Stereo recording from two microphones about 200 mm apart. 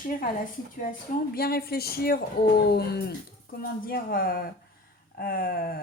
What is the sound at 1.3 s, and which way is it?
A woman's voice, 50° left (ahead or behind).